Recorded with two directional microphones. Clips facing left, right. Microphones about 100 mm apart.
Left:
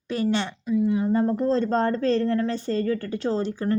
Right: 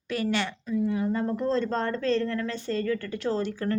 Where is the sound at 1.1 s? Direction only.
30° left (ahead or behind).